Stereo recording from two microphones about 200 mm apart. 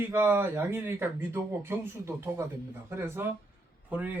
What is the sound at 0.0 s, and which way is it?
Speech, 10° right (ahead or behind).